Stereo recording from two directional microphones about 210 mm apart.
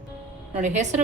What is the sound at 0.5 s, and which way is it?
Speech, 35° right (ahead or behind).